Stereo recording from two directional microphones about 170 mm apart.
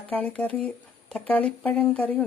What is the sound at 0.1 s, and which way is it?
Speech, 10° left (ahead or behind).